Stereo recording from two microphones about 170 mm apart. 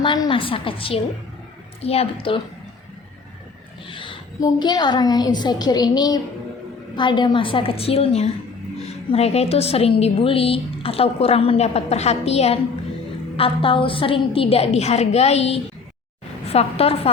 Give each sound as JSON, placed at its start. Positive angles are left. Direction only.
{"t": 0.0, "sound": "a woman's voice", "side_deg": 30}
{"t": 3.8, "sound": "a woman's voice", "side_deg": 30}